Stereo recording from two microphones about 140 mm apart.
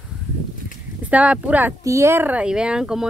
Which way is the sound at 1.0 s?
10° right (ahead or behind).